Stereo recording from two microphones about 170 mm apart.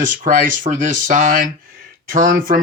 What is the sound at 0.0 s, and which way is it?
Speech, 50° right (ahead or behind).